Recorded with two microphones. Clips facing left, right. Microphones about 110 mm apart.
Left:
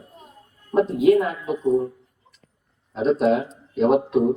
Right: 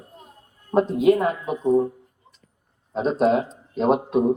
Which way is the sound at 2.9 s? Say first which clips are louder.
Left 1 dB; 35° right (ahead or behind).